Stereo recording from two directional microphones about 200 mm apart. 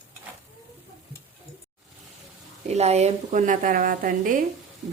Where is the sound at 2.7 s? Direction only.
35° right (ahead or behind).